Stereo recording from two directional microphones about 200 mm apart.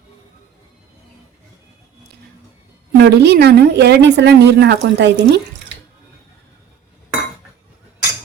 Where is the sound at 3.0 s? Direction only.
55° right (ahead or behind).